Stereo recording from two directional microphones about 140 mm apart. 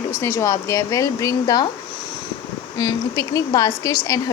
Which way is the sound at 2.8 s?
25° left (ahead or behind).